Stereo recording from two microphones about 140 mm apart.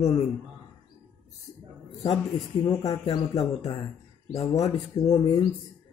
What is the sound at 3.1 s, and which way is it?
Speech, 45° left (ahead or behind).